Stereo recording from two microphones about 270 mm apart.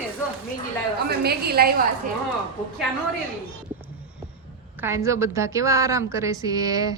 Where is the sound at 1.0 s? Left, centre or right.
Right.